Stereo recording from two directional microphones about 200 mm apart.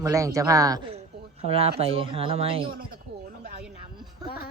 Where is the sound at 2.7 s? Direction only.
45° right (ahead or behind).